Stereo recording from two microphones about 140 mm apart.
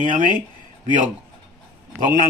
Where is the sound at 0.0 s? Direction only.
70° right (ahead or behind).